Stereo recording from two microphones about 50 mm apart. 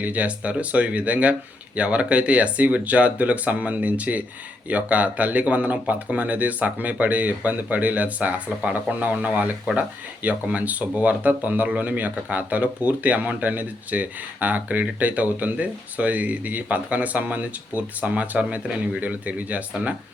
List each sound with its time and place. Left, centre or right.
0.0 s speech: right